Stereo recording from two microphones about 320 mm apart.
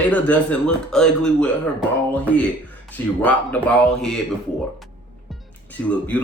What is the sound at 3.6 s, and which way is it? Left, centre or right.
Speech, centre.